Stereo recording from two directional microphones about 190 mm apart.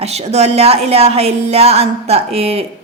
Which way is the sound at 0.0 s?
35° right (ahead or behind).